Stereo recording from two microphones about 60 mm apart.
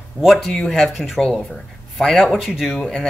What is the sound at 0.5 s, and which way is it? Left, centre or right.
Speech, centre.